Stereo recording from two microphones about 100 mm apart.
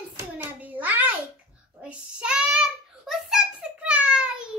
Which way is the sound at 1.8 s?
10° right (ahead or behind).